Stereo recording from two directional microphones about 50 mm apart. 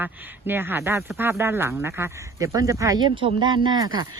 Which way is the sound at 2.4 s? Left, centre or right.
Right.